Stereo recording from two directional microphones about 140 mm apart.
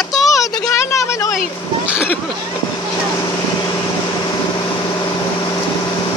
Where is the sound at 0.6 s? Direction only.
20° left (ahead or behind).